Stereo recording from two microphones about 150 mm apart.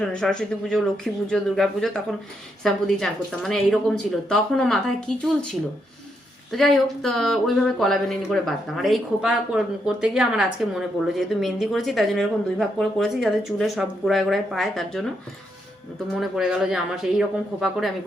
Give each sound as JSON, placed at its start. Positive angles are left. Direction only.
{"t": 0.0, "sound": "speech", "side_deg": 5}
{"t": 16.2, "sound": "speech", "side_deg": -5}